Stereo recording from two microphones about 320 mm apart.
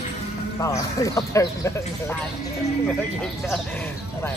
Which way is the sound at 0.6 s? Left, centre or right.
Centre.